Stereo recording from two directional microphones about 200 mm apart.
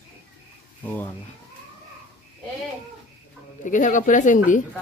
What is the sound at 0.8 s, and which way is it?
Speech, 10° left (ahead or behind).